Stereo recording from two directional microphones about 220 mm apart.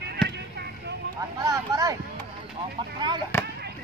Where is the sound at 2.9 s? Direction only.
20° right (ahead or behind).